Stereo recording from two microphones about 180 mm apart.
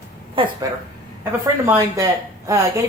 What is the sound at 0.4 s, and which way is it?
Speech, 30° right (ahead or behind).